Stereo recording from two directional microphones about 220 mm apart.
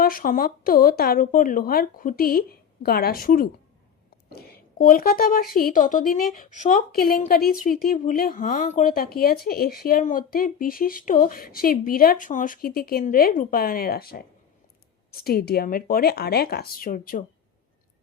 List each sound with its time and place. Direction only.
0.0 s a woman's voice: 40° left (ahead or behind)